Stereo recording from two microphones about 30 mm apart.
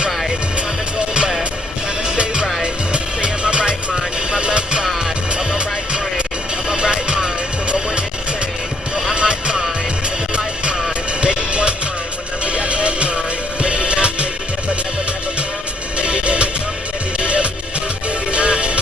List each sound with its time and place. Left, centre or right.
0.9 s music: right
6.7 s music: right
9.1 s music: right
16.0 s music: right